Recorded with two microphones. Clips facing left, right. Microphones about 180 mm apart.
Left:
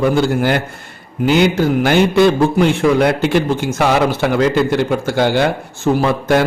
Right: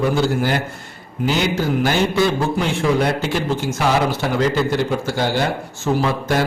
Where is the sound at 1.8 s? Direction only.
60° left (ahead or behind).